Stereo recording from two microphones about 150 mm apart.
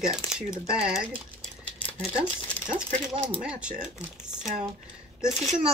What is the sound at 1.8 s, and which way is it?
Speech, 10° left (ahead or behind).